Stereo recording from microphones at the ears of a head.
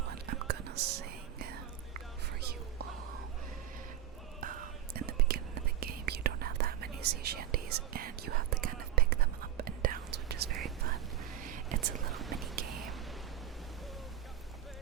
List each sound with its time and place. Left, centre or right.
0.0 s whispering: right
4.4 s whispering: right